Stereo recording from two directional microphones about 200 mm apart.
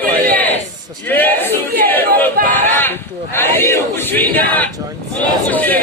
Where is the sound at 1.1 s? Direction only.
10° left (ahead or behind).